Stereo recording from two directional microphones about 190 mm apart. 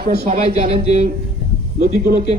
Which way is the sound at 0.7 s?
35° right (ahead or behind).